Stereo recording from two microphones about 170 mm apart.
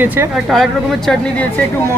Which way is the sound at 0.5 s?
Centre (ahead or behind).